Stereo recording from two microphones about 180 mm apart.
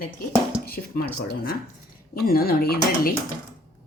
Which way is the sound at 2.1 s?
60° left (ahead or behind).